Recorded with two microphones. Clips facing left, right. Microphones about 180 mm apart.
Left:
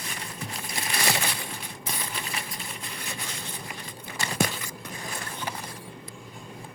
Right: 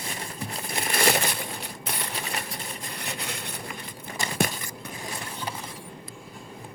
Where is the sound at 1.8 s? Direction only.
70° right (ahead or behind).